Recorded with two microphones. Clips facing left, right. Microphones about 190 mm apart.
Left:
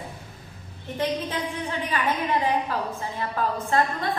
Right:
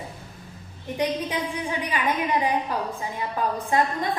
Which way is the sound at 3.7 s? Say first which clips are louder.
Right 1 dB; 15° right (ahead or behind).